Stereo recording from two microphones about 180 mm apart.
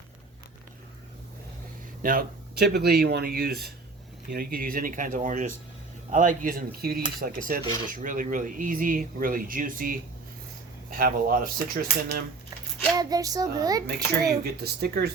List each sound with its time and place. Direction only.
2.0 s speech: 50° right (ahead or behind)
13.0 s a sound: 20° right (ahead or behind)
14.4 s speech: 60° right (ahead or behind)